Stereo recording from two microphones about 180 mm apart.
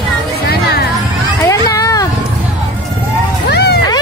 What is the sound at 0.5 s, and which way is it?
Music, 60° left (ahead or behind).